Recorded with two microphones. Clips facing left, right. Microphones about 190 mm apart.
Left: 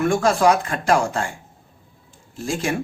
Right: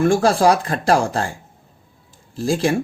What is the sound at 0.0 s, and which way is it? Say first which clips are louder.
Speech: right 2 dB; 30° right (ahead or behind).